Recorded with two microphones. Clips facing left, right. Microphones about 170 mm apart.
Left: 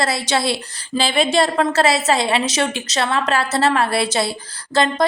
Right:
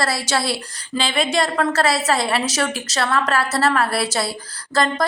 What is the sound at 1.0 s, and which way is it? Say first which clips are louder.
A woman's voice: left 3 dB; 30° left (ahead or behind).